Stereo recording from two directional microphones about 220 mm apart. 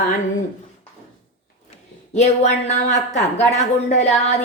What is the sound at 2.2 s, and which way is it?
Speech, 30° left (ahead or behind).